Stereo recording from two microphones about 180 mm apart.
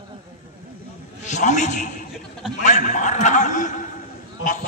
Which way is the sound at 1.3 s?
40° left (ahead or behind).